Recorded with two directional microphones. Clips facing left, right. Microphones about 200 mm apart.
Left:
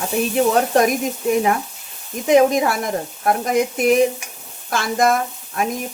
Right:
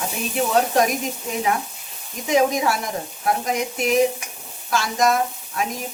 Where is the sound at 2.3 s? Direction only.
55° left (ahead or behind).